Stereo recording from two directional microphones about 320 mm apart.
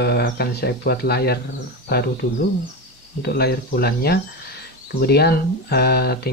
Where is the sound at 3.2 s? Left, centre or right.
Left.